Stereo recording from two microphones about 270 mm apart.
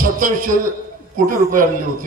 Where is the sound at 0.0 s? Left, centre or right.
Right.